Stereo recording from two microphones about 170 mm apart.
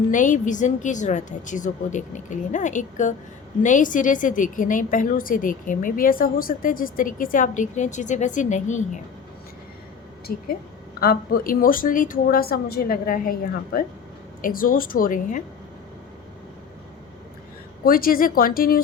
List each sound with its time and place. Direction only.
0.1 s a woman's voice: 50° left (ahead or behind)
10.3 s a woman's voice: 60° left (ahead or behind)
17.8 s a woman's voice: 60° left (ahead or behind)